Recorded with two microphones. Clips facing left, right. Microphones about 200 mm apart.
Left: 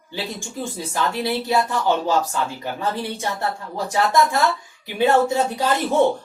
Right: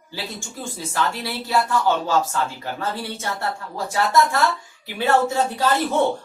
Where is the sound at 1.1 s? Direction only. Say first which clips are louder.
Left 3 dB; 20° left (ahead or behind).